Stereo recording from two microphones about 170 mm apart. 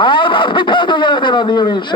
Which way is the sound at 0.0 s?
30° left (ahead or behind).